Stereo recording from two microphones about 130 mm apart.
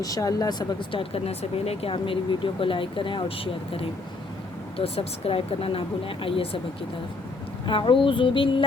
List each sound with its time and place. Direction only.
0.0 s speech: 25° left (ahead or behind); by 6.6 s 45° left (ahead or behind)
7.7 s music: 40° left (ahead or behind)